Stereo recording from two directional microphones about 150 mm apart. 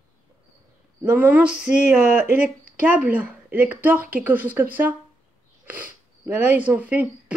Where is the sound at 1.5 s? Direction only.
55° left (ahead or behind).